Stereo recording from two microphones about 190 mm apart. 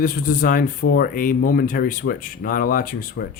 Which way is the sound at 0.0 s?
45° left (ahead or behind).